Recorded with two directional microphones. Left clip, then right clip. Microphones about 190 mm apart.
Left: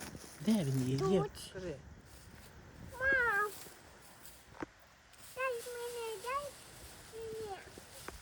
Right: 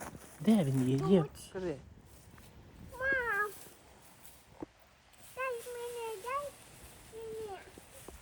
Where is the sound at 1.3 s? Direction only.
15° left (ahead or behind).